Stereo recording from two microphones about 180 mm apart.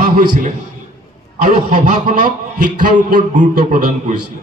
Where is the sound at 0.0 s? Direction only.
50° right (ahead or behind).